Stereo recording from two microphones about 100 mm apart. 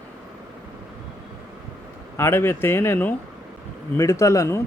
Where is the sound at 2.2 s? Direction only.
25° left (ahead or behind).